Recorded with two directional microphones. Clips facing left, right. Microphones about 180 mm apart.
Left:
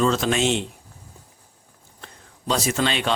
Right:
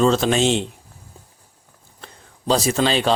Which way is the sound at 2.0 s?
35° right (ahead or behind).